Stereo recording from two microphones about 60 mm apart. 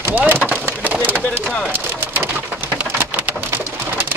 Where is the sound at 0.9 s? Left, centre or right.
Right.